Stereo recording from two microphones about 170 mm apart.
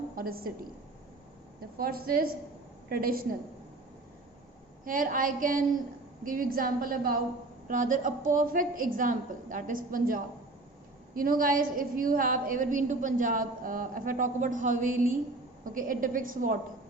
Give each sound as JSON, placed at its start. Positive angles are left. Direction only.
{"t": 0.2, "sound": "a woman's voice", "side_deg": -60}
{"t": 1.8, "sound": "a woman's voice", "side_deg": -60}
{"t": 4.9, "sound": "a woman's voice", "side_deg": -55}